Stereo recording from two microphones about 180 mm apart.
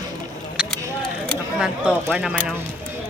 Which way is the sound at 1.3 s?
5° right (ahead or behind).